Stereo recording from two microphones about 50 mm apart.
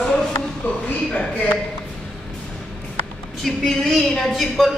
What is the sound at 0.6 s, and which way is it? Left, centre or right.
Speech, left.